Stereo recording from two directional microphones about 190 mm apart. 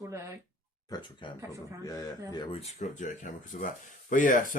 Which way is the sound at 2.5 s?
35° left (ahead or behind).